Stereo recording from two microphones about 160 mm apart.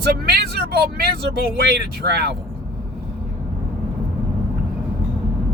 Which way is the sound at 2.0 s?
90° right.